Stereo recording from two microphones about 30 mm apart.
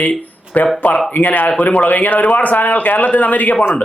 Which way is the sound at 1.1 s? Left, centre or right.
Left.